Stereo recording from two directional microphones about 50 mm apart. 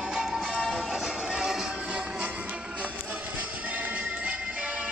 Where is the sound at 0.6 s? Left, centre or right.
Centre.